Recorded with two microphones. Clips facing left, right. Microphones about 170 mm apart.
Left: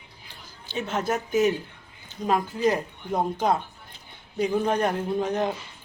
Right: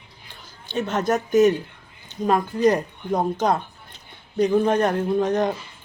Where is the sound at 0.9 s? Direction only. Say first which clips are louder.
Right 4 dB; 10° left (ahead or behind).